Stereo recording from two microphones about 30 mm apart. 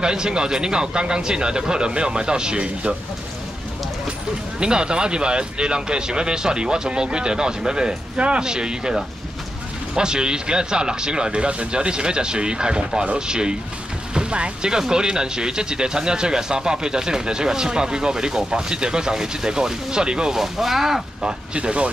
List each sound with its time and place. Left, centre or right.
0.0 s speech: right
4.6 s speech: right
14.6 s speech: right
20.3 s speech: centre
21.5 s speech: right